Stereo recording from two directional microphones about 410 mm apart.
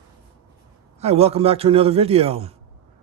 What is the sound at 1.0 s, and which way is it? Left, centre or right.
A man's voice, centre.